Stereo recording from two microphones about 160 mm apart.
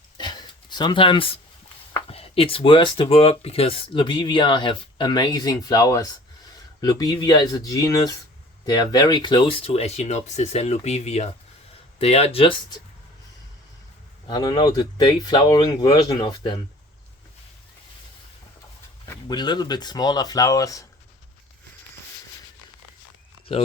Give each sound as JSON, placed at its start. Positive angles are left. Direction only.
{"t": 0.2, "sound": "a sound", "side_deg": 30}
{"t": 2.0, "sound": "speech", "side_deg": 40}
{"t": 14.3, "sound": "speech", "side_deg": 25}
{"t": 19.3, "sound": "speech", "side_deg": 25}
{"t": 23.5, "sound": "speech", "side_deg": 40}